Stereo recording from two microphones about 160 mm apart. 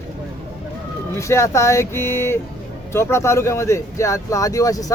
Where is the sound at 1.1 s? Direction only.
20° left (ahead or behind).